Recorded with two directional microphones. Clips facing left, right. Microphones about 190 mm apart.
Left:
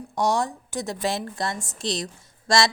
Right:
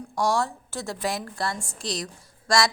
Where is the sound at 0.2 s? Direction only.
20° left (ahead or behind).